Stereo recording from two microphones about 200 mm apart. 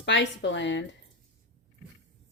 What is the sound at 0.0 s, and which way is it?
Speech, 65° left (ahead or behind).